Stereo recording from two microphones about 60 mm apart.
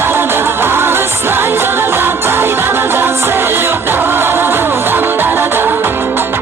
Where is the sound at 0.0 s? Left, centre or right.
Right.